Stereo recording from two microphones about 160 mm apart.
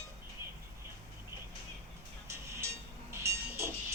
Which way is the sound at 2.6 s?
15° right (ahead or behind).